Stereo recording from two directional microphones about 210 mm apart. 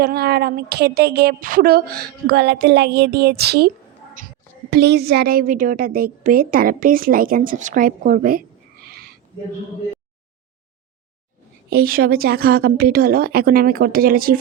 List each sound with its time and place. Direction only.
0.0 s a woman's voice: 50° right (ahead or behind)
11.7 s a woman's voice: 45° right (ahead or behind)